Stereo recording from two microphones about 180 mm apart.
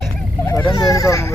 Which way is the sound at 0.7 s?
20° left (ahead or behind).